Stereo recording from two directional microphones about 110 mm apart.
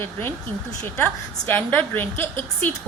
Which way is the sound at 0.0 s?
20° left (ahead or behind).